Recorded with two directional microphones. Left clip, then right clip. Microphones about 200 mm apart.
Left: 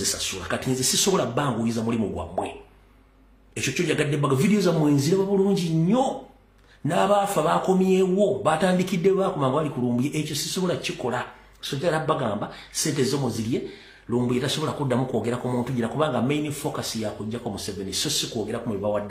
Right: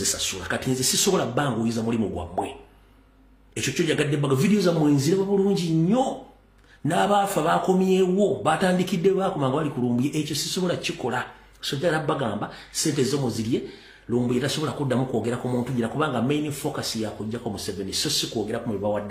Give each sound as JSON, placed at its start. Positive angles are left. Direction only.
{"t": 0.0, "sound": "a man's voice", "side_deg": 0}